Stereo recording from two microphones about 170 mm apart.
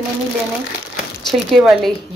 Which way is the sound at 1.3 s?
Centre (ahead or behind).